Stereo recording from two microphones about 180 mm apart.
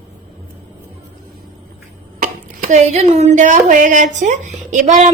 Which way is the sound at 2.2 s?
45° right (ahead or behind).